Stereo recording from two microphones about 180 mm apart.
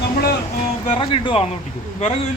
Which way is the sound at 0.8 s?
30° left (ahead or behind).